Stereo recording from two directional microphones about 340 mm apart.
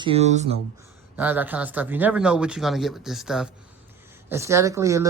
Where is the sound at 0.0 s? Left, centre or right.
Centre.